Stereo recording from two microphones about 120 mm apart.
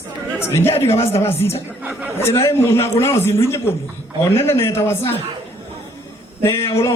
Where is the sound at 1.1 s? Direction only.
20° left (ahead or behind).